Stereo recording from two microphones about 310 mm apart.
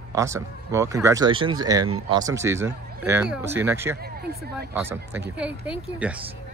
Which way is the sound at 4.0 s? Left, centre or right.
Right.